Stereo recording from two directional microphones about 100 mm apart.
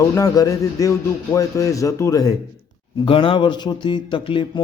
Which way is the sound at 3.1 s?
60° left (ahead or behind).